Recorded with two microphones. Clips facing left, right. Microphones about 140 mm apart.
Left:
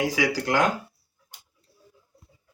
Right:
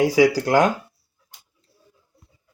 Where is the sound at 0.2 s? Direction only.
35° right (ahead or behind).